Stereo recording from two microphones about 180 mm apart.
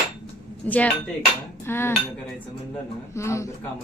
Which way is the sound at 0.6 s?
10° left (ahead or behind).